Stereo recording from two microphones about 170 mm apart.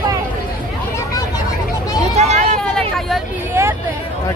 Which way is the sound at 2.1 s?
40° right (ahead or behind).